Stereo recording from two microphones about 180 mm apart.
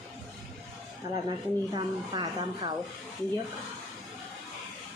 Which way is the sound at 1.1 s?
25° right (ahead or behind).